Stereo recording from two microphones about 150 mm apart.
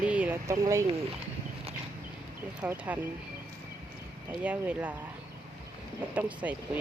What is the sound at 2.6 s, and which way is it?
Speech, 10° right (ahead or behind).